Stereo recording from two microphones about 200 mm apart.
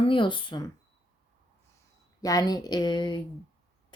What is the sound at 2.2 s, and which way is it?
Speech, 20° left (ahead or behind).